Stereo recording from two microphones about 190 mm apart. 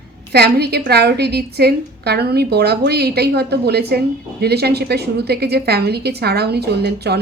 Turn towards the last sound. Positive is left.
turn(degrees=-60)  # may be behind; listen again after turning